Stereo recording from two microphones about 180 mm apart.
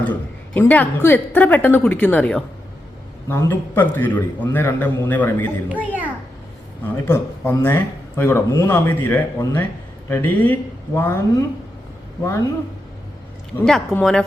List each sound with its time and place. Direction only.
0.1 s speech: 10° left (ahead or behind)
5.6 s a child's voice: 10° right (ahead or behind)
7.0 s speech: 15° left (ahead or behind)
13.7 s speech: centre (ahead or behind)